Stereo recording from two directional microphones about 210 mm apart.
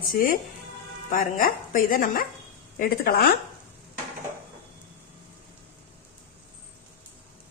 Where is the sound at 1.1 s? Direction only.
40° left (ahead or behind).